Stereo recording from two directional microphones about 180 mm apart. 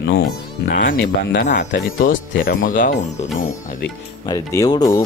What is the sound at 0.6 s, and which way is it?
Speech, 55° left (ahead or behind).